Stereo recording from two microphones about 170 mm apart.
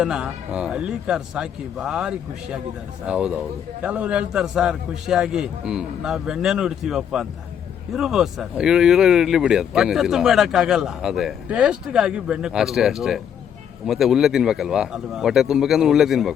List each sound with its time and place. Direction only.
0.0 s speech: 5° right (ahead or behind)